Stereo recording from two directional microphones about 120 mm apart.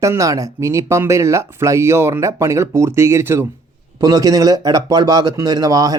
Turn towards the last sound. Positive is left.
turn(degrees=-30)  # may be behind; listen again after turning